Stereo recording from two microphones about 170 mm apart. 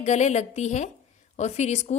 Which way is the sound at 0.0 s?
40° left (ahead or behind).